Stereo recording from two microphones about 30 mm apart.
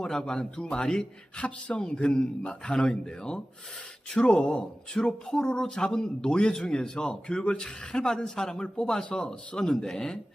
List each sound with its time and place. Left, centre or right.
0.0 s a woman's voice: centre
1.4 s a man's voice: left
2.7 s a woman's voice: left
6.5 s a woman's voice: centre